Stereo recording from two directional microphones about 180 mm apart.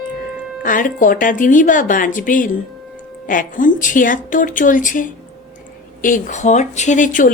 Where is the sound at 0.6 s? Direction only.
50° left (ahead or behind).